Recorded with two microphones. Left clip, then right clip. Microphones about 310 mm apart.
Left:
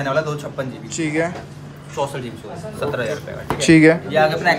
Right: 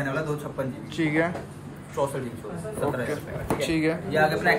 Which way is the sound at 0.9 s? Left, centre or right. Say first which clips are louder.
Left 4 dB; centre.